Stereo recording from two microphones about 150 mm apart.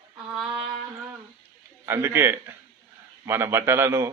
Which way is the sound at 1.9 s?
15° right (ahead or behind).